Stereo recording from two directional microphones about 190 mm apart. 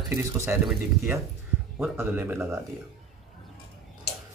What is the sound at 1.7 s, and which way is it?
Speech, 10° right (ahead or behind).